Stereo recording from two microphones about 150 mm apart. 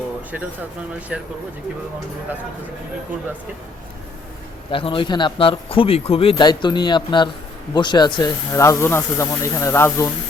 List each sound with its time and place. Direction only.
1.1 s speech: 5° right (ahead or behind)
4.7 s speech: 35° left (ahead or behind); by 10.1 s 15° left (ahead or behind)